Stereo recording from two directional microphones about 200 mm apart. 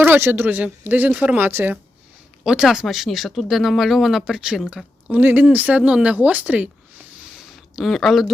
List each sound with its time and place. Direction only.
0.0 s speech: 10° right (ahead or behind)